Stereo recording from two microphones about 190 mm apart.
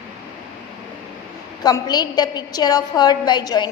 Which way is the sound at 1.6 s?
20° left (ahead or behind).